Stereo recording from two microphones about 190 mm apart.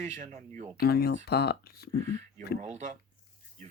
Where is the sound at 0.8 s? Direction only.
55° left (ahead or behind).